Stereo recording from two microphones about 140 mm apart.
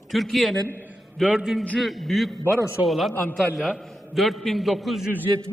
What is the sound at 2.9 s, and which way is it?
A man's voice, centre (ahead or behind).